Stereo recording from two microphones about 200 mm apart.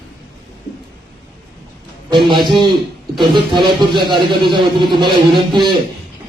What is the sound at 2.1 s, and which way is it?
A man's voice, 25° right (ahead or behind).